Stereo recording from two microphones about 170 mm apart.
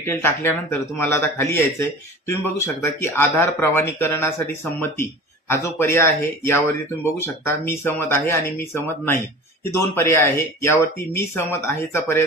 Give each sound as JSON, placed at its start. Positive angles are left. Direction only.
{"t": 0.0, "sound": "speech", "side_deg": 15}